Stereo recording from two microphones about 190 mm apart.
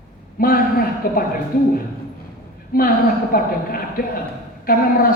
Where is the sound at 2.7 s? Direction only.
50° left (ahead or behind).